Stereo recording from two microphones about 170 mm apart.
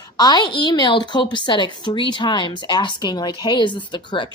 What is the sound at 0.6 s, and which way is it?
Speech, 25° left (ahead or behind).